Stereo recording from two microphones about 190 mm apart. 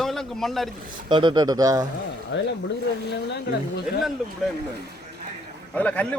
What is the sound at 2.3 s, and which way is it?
Speech, 75° left (ahead or behind).